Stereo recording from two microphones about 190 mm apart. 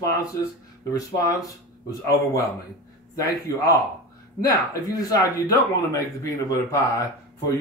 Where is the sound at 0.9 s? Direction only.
15° left (ahead or behind).